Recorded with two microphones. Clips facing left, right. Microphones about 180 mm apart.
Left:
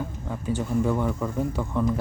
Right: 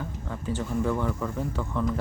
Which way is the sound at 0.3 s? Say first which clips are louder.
Left 3 dB; 15° left (ahead or behind).